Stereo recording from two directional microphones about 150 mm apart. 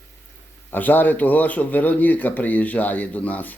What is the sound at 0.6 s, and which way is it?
Speech, 10° left (ahead or behind).